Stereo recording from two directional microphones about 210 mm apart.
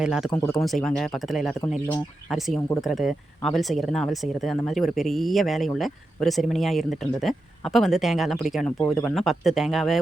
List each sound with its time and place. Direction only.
0.0 s speech: centre (ahead or behind)
8.8 s speech: 10° left (ahead or behind)